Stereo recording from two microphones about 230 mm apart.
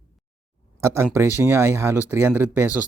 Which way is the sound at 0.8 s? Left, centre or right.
Centre.